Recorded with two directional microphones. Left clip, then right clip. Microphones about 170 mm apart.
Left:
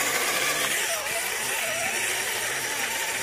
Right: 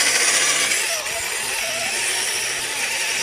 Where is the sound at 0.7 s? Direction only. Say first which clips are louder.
Right 4 dB; 45° right (ahead or behind).